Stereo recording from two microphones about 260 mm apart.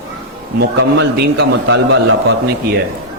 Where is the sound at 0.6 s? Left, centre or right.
Right.